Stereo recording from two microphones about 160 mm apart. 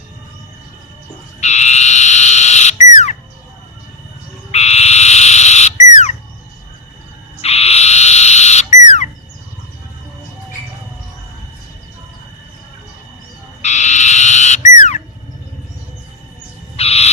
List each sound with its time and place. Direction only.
1.4 s frog: 45° left (ahead or behind)
4.5 s frog: 40° left (ahead or behind)
7.4 s frog: 40° left (ahead or behind)
13.6 s frog: 45° left (ahead or behind)
16.7 s owl: 40° left (ahead or behind)